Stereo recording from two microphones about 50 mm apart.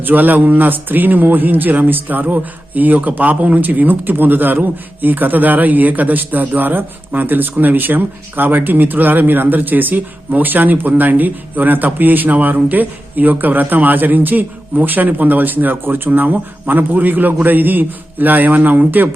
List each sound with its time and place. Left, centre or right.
0.0 s a man's voice: right